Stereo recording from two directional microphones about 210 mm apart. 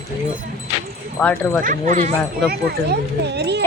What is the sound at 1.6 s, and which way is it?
Speech, 40° right (ahead or behind).